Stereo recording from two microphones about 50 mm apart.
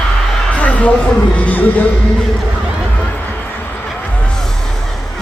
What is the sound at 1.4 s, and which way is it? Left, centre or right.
Music, left.